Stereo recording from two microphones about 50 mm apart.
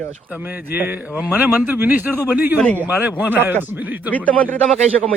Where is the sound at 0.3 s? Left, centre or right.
Right.